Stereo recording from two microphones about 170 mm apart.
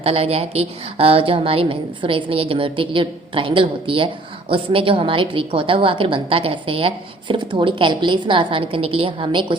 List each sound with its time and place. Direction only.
0.0 s a woman's voice: 35° right (ahead or behind)